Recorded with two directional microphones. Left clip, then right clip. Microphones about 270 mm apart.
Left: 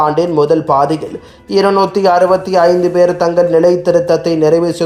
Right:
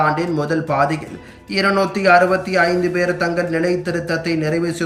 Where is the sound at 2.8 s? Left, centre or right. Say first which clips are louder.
Left 8 dB; left.